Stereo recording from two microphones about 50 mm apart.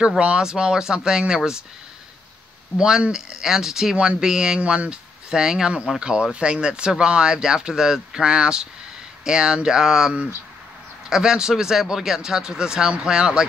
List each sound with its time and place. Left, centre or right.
0.2 s speech: centre
3.1 s speech: centre